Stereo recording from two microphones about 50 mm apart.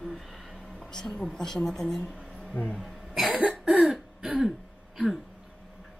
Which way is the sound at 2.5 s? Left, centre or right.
Left.